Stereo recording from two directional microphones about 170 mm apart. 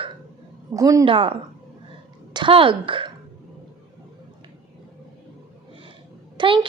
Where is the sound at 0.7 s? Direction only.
20° right (ahead or behind).